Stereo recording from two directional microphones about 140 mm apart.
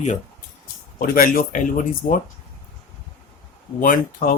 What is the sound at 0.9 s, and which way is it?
Speech, 85° left.